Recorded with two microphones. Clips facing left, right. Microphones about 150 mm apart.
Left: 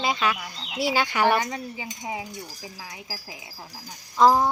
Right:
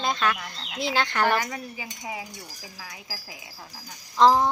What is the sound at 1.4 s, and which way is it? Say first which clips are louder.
Speech: left 2 dB; 25° left (ahead or behind).